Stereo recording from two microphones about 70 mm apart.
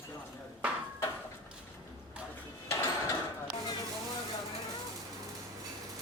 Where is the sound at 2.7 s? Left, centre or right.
Left.